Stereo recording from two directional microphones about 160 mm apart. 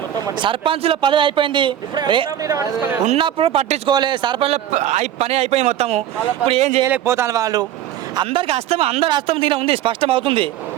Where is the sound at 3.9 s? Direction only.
30° right (ahead or behind).